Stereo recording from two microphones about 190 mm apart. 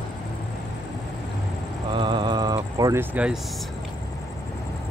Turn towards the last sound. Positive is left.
turn(degrees=-10)  # may be behind; listen again after turning